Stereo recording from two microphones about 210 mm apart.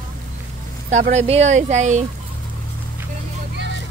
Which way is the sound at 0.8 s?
35° right (ahead or behind).